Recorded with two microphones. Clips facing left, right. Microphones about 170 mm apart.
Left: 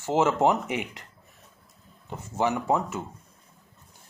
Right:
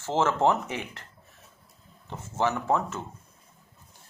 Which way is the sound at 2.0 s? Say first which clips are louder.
Left 1 dB; 15° left (ahead or behind).